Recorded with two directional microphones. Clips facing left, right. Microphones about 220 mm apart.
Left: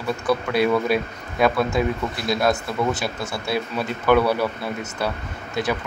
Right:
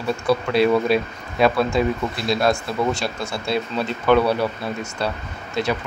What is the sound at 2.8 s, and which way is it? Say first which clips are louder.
Speech: right 1 dB; 5° left (ahead or behind).